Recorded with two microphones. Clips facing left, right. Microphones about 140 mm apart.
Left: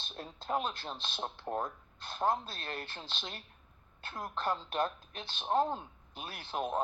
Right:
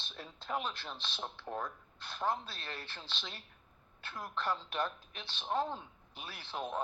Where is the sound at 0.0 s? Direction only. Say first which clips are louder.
Left 4 dB; 45° left (ahead or behind).